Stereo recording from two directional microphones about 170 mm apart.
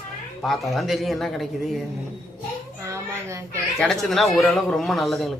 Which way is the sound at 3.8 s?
Centre (ahead or behind).